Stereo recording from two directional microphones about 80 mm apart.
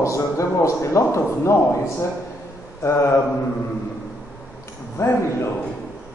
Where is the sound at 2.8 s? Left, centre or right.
Left.